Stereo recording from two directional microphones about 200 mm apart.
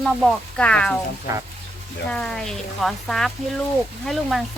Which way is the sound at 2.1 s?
5° left (ahead or behind).